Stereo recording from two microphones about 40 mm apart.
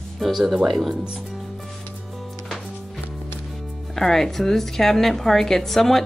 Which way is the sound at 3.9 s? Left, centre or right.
Centre.